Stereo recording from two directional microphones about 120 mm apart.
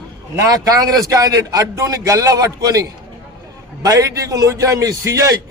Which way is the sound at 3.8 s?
30° right (ahead or behind).